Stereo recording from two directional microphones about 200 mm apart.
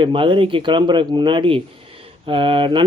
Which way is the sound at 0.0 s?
25° right (ahead or behind).